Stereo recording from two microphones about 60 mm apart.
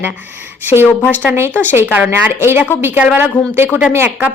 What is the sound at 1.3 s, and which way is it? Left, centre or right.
Speech, right.